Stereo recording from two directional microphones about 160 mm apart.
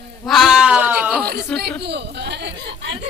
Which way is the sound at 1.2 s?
80° right.